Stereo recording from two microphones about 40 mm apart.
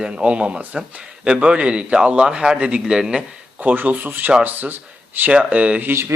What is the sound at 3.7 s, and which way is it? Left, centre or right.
Speech, right.